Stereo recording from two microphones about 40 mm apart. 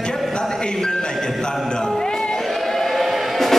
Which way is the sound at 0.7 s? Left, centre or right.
Centre.